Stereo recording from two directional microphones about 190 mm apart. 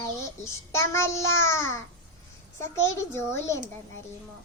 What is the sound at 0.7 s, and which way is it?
A child's voice, 15° left (ahead or behind).